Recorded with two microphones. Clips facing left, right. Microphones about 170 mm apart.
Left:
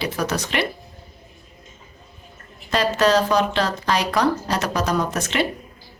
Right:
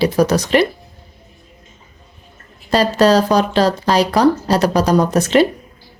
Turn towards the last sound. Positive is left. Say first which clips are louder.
# right 9 dB
turn(degrees=-40)  # may be behind; listen again after turning